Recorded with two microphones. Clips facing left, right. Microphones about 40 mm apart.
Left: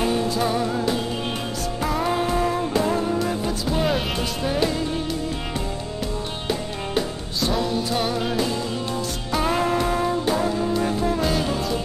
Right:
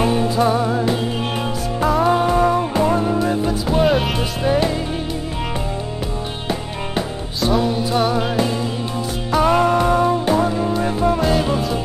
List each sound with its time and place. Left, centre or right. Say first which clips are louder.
0.0 s music: right 5 dB; centre
4.2 s music: right 5 dB; centre
7.0 s music: right 2 dB; centre